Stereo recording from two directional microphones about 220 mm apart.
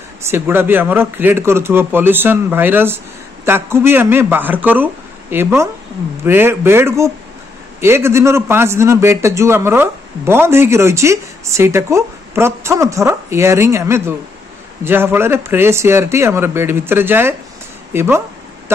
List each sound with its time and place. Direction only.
0.3 s a man's voice: 10° right (ahead or behind)